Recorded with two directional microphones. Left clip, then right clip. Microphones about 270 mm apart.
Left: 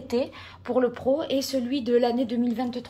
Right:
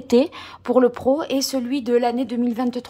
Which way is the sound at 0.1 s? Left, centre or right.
Right.